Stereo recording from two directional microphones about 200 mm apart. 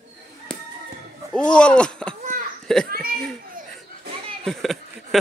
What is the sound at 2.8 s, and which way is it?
Speech, 50° right (ahead or behind).